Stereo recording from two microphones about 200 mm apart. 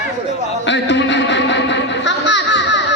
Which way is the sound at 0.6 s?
60° left (ahead or behind).